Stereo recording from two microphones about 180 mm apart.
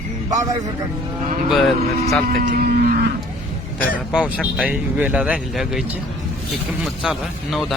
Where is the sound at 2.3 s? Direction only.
50° right (ahead or behind).